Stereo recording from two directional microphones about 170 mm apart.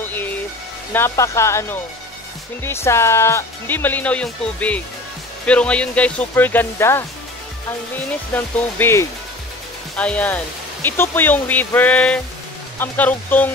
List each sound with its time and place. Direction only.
0.0 s music: 10° left (ahead or behind)
0.9 s speech: 15° left (ahead or behind)
8.1 s speech: 10° left (ahead or behind)